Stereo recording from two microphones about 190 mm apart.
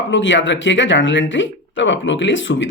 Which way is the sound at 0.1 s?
75° left (ahead or behind).